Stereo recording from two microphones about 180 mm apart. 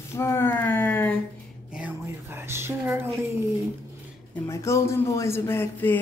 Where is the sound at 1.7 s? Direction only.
10° right (ahead or behind).